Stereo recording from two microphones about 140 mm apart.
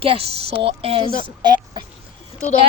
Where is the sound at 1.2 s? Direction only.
30° right (ahead or behind).